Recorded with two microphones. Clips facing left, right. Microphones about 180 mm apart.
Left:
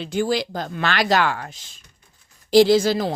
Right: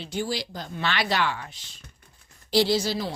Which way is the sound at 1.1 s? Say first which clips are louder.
Left 6 dB; 50° left (ahead or behind).